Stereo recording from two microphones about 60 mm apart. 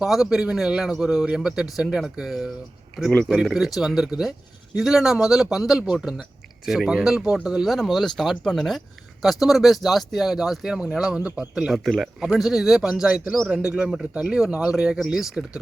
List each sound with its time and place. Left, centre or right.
0.0 s a man's voice: centre
7.7 s a man's voice: centre
11.7 s a man's voice: centre